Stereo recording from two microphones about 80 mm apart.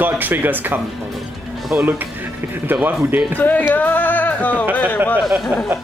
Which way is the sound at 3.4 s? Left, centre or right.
Left.